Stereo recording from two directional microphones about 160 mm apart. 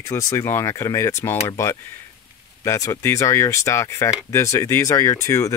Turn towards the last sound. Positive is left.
turn(degrees=15)  # may be behind; listen again after turning